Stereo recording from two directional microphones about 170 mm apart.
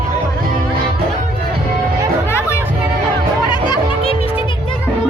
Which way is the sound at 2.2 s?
15° left (ahead or behind).